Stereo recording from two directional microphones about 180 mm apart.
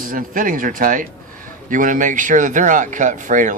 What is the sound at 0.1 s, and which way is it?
Speech, 50° right (ahead or behind).